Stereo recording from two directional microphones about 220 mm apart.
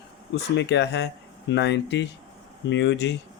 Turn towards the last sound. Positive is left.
turn(degrees=50)  # may be behind; listen again after turning